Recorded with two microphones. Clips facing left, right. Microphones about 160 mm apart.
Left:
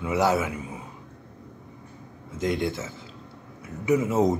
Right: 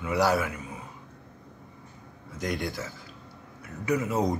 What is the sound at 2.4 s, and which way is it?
Speech, 25° left (ahead or behind).